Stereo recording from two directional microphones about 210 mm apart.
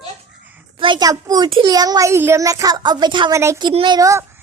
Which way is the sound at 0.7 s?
20° right (ahead or behind).